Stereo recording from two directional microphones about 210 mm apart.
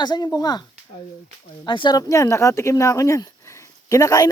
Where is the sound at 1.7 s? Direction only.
20° left (ahead or behind).